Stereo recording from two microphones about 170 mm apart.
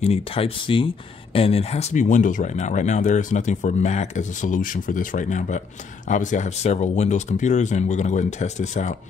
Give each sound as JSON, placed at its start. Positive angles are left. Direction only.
{"t": 0.0, "sound": "speech", "side_deg": 35}